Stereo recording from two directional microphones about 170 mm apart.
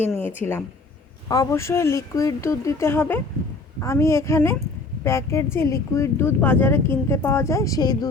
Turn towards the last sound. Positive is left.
turn(degrees=20)  # may be behind; listen again after turning